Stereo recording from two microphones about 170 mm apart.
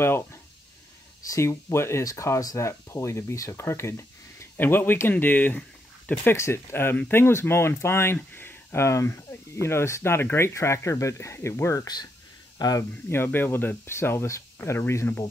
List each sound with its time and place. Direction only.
0.0 s speech: 15° left (ahead or behind)